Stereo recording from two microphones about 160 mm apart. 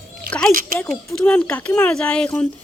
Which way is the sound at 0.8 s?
5° left (ahead or behind).